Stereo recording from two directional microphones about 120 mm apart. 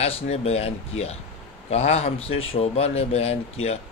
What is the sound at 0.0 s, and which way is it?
Speech, 55° left (ahead or behind).